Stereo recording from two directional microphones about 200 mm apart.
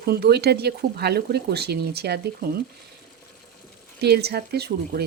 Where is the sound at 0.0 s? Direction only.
50° right (ahead or behind).